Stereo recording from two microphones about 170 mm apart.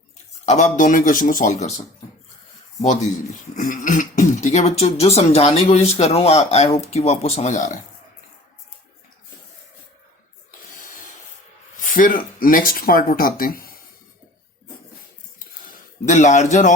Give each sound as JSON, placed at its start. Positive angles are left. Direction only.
{"t": 0.4, "sound": "speech", "side_deg": 45}
{"t": 3.5, "sound": "speech", "side_deg": 50}
{"t": 10.8, "sound": "rub", "side_deg": 55}
{"t": 11.8, "sound": "speech", "side_deg": 55}
{"t": 16.0, "sound": "speech", "side_deg": 45}